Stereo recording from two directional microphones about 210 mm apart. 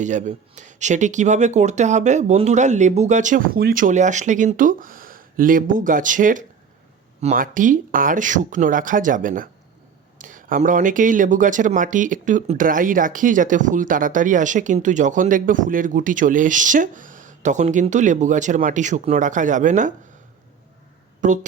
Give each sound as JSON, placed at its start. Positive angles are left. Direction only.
{"t": 0.0, "sound": "speech", "side_deg": -35}
{"t": 21.2, "sound": "speech", "side_deg": -35}